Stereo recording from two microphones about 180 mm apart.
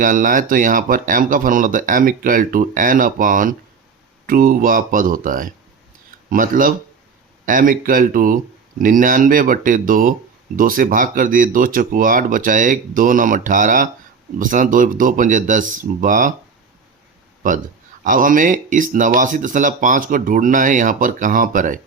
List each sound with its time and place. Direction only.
0.0 s speech: 50° right (ahead or behind)
17.4 s speech: 50° right (ahead or behind)